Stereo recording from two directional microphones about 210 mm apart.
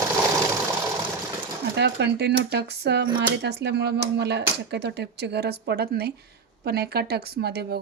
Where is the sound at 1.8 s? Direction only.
55° right (ahead or behind).